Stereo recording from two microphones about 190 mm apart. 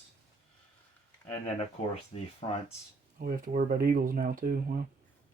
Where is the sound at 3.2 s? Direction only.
45° right (ahead or behind).